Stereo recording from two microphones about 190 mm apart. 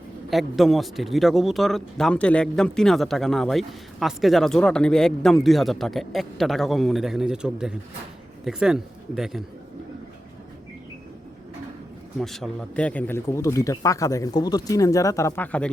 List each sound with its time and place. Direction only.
0.3 s a man's voice: centre (ahead or behind)
12.2 s speech: centre (ahead or behind)